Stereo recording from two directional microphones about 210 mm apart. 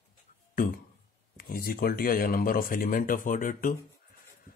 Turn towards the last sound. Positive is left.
turn(degrees=40)  # may be behind; listen again after turning